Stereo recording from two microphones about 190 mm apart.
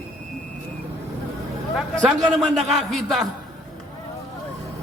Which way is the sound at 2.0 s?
20° right (ahead or behind).